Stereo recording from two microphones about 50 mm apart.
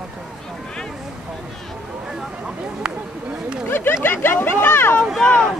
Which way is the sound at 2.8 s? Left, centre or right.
Centre.